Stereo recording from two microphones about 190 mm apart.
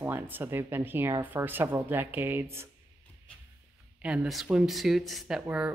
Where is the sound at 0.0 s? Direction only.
10° right (ahead or behind).